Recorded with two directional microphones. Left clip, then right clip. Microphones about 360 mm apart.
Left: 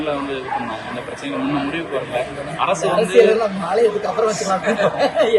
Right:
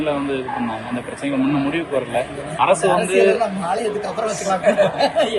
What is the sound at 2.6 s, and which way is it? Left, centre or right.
Speech, right.